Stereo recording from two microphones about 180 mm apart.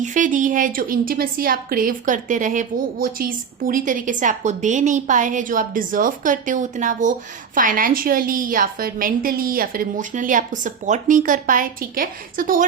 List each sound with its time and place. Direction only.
0.0 s a woman's voice: 45° right (ahead or behind)